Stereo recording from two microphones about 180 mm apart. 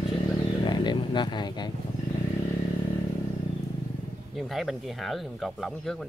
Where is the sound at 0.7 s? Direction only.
25° left (ahead or behind).